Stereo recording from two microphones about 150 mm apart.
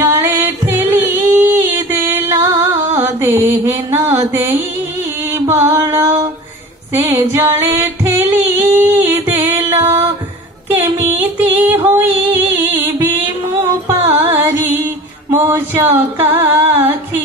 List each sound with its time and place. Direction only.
0.0 s music: 15° right (ahead or behind)
3.5 s a sound: 15° right (ahead or behind)
4.2 s mantra: 15° right (ahead or behind)
5.7 s singing: 15° right (ahead or behind)
6.9 s female singing: 15° right (ahead or behind)
9.8 s music: 15° right (ahead or behind)
10.7 s a sound: 15° right (ahead or behind)
11.1 s female singing: 15° right (ahead or behind)
13.7 s music: 20° right (ahead or behind)
15.3 s singing: 15° right (ahead or behind)